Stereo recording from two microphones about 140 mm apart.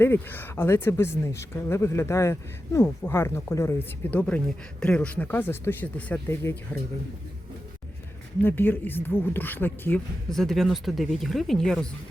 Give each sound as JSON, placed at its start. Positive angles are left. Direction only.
{"t": 0.0, "sound": "speech", "side_deg": 15}
{"t": 8.4, "sound": "speech", "side_deg": 15}
{"t": 10.2, "sound": "speech", "side_deg": 5}